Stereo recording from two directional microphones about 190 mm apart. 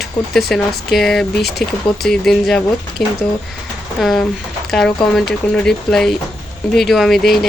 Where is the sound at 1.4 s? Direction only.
60° left (ahead or behind).